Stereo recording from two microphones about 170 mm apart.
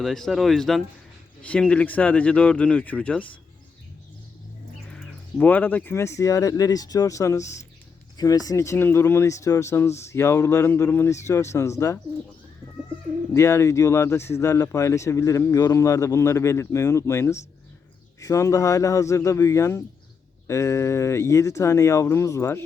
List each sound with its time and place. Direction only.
0.0 s speech: centre (ahead or behind)
4.9 s speech: 10° left (ahead or behind)
13.3 s speech: 15° left (ahead or behind)